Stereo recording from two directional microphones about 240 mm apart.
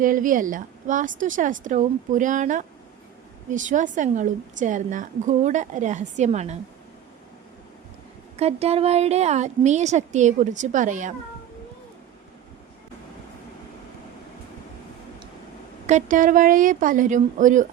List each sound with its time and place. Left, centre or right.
0.0 s a woman's voice: right
8.4 s a woman's voice: right
15.9 s a woman's voice: right